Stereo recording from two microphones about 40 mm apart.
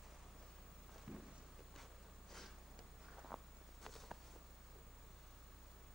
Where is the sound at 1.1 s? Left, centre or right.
Right.